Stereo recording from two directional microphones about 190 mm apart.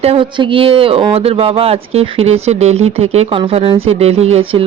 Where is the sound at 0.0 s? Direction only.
30° right (ahead or behind).